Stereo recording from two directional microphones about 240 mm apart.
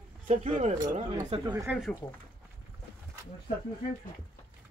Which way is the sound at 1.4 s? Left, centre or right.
Centre.